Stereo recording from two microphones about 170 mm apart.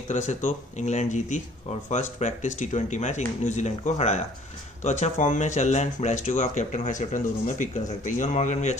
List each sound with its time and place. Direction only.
0.1 s speech: 45° left (ahead or behind)